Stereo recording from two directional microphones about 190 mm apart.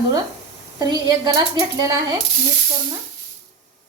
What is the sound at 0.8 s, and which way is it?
A woman's voice, 20° right (ahead or behind).